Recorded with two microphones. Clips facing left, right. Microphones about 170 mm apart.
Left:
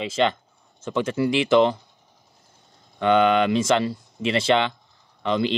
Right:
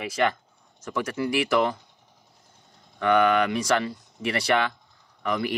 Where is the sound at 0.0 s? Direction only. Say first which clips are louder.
Left 3 dB; 25° left (ahead or behind).